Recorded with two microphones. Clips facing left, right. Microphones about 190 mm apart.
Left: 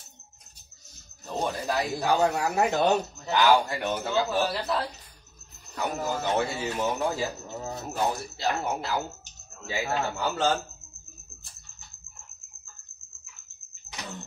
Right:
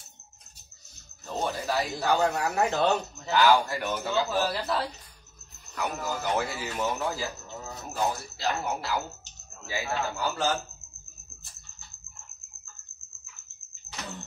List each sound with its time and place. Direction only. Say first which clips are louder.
1.2 s speech: left 1 dB; 15° left (ahead or behind)
4.0 s speech: left 1 dB; centre (ahead or behind)
5.8 s speech: left 2 dB; 30° left (ahead or behind)